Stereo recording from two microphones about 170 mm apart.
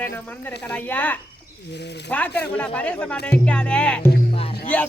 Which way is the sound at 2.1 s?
10° left (ahead or behind).